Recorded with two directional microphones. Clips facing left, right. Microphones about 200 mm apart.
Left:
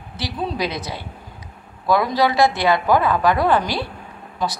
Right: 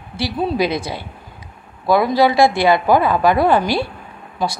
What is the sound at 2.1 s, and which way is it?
A woman's voice, 10° right (ahead or behind).